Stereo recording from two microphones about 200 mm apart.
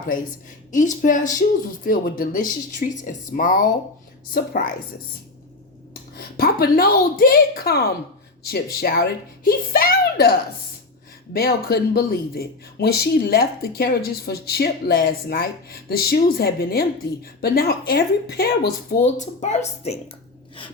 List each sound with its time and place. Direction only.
0.7 s speech: 40° left (ahead or behind)
5.9 s speech: 50° left (ahead or behind)
11.3 s speech: 50° left (ahead or behind)
19.1 s speech: 35° left (ahead or behind)